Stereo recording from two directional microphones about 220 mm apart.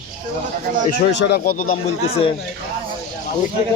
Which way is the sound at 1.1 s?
50° left (ahead or behind).